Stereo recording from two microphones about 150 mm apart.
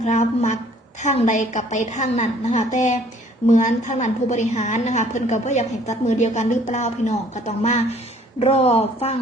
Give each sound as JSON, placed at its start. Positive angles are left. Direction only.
{"t": 0.0, "sound": "a woman's voice", "side_deg": 50}